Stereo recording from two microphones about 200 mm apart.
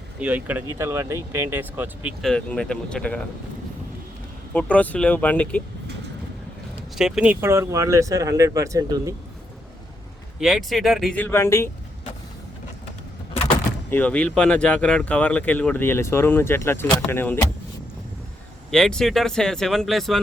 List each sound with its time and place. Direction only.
0.2 s speech: 10° right (ahead or behind)
2.2 s speech: 5° left (ahead or behind)
4.5 s speech: 5° left (ahead or behind)
6.9 s speech: 5° right (ahead or behind)
10.4 s speech: centre (ahead or behind)
13.9 s speech: 5° left (ahead or behind)
18.7 s speech: 5° left (ahead or behind)